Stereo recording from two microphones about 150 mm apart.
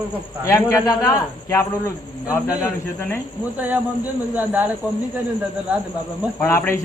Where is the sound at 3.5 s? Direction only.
10° right (ahead or behind).